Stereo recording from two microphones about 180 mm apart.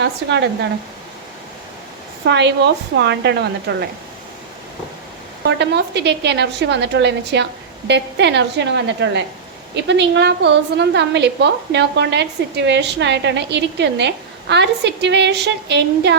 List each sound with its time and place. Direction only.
0.0 s a woman's voice: 70° right (ahead or behind)
2.2 s a woman's voice: 70° right (ahead or behind)
5.5 s a woman's voice: 70° right (ahead or behind)